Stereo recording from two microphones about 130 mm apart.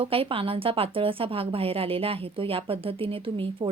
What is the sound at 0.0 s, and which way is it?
A woman's voice, 45° right (ahead or behind).